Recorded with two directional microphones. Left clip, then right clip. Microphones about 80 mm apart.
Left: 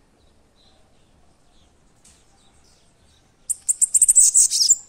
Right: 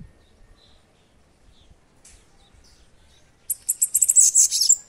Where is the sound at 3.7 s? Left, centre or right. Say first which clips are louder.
Left 3 dB; left.